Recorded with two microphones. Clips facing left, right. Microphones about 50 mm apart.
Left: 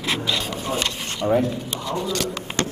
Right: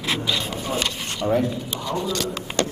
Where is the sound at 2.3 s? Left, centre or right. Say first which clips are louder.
Right 1 dB; left.